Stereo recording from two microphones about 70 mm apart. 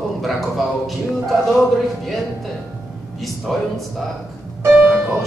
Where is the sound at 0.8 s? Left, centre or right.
Centre.